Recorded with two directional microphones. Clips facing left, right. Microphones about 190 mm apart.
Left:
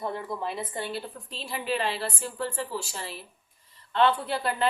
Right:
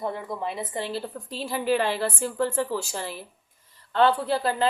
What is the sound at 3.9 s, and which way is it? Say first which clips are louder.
Speech: right 3 dB; 35° right (ahead or behind).